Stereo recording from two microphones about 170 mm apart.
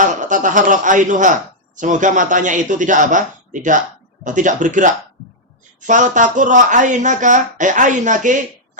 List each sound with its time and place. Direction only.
0.0 s a man's voice: 50° right (ahead or behind)